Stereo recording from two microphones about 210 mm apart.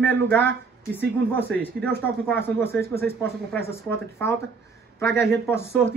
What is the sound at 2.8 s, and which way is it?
Speech, 50° right (ahead or behind).